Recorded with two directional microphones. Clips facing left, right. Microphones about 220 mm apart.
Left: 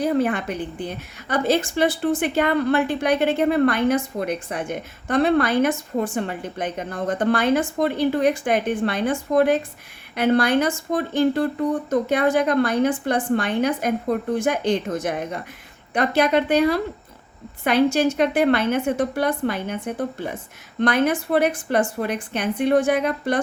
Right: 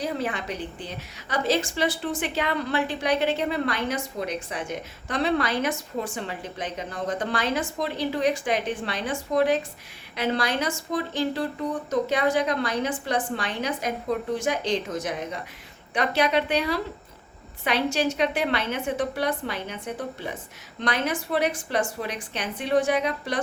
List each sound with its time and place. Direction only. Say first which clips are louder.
0.0 s a woman's voice: left 8 dB; 55° left (ahead or behind)